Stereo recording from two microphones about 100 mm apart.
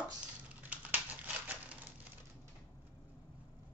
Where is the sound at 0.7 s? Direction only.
15° right (ahead or behind).